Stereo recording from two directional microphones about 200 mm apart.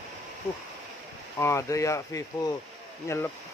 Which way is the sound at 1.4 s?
15° left (ahead or behind).